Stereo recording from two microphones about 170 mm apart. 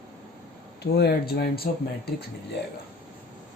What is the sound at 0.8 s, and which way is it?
Speech, 70° left (ahead or behind).